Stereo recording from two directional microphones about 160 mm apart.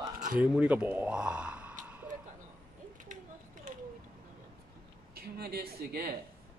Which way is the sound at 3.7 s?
55° right (ahead or behind).